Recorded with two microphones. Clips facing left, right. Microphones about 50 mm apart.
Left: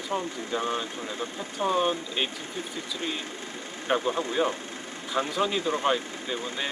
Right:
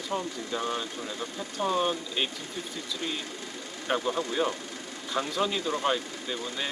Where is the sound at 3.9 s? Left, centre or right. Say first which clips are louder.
Left 2 dB; centre.